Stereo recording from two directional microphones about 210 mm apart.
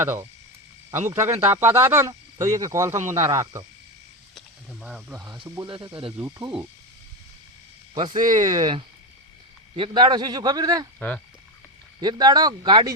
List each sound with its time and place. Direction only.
0.0 s speech: 10° right (ahead or behind)
4.4 s speech: centre (ahead or behind)
5.4 s a man's voice: 25° right (ahead or behind)
6.1 s speech: 10° right (ahead or behind)
8.1 s speech: 35° right (ahead or behind)
8.4 s a man's voice: 20° right (ahead or behind)
11.9 s a man's voice: 20° right (ahead or behind)